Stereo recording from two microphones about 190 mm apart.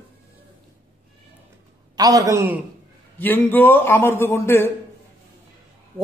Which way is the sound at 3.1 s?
10° left (ahead or behind).